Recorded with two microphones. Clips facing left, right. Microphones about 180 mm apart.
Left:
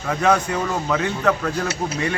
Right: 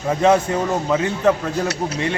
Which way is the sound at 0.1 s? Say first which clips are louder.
Right 3 dB; 25° right (ahead or behind).